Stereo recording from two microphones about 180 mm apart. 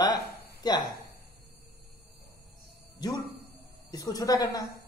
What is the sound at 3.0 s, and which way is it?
A man's voice, 20° left (ahead or behind).